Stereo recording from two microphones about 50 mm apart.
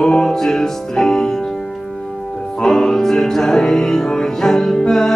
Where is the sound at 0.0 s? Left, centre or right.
Centre.